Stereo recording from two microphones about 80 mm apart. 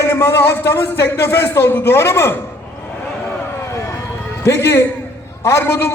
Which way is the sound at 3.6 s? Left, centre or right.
Left.